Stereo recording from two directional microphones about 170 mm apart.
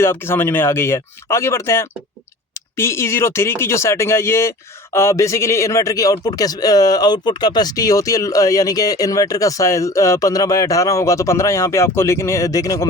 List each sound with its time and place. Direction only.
0.0 s speech: 15° left (ahead or behind)